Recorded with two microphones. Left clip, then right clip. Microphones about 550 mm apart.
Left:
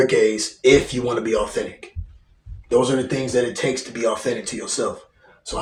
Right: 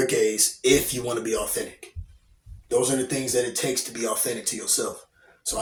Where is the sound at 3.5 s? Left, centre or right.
Right.